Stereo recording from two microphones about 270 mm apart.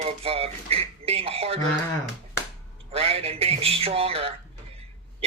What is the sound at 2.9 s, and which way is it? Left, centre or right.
Speech, right.